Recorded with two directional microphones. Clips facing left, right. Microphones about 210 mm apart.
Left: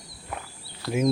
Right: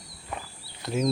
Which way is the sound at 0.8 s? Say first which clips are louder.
Left 2 dB; 20° right (ahead or behind).